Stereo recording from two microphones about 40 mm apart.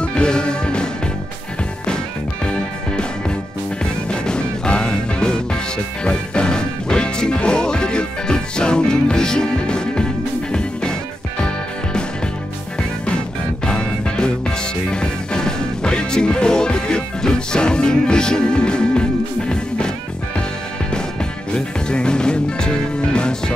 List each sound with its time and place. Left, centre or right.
0.0 s music: left
2.4 s music: left
13.7 s music: left
20.9 s music: left